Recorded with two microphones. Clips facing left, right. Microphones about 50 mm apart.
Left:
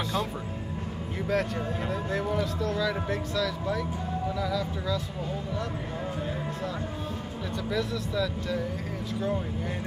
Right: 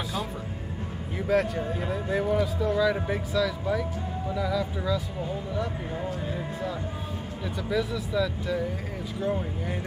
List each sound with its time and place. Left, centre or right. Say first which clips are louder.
1.2 s a man's voice: right 3 dB; centre
7.7 s a man's voice: right 3 dB; centre